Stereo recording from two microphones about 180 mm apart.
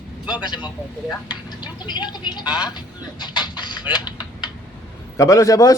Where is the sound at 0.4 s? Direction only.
25° left (ahead or behind).